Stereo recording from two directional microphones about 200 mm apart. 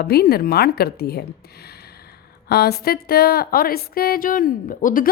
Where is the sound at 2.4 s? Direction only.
50° left (ahead or behind).